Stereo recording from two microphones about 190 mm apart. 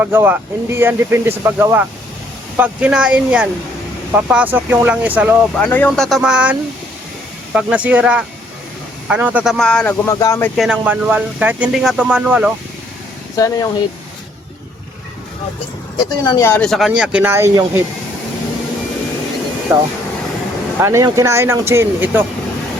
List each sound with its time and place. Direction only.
0.0 s speech: 10° right (ahead or behind)
5.5 s speech: 10° left (ahead or behind)
10.1 s speech: 15° left (ahead or behind)
10.6 s speech: 5° right (ahead or behind)
13.3 s speech: 20° left (ahead or behind)
16.0 s speech: 20° left (ahead or behind); by 17.8 s 15° right (ahead or behind)
19.7 s speech: 15° right (ahead or behind)